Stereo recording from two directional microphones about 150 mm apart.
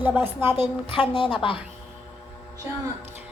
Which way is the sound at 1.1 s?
35° left (ahead or behind).